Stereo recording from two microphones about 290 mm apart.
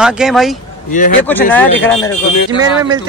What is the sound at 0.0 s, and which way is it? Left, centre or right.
Speech, centre.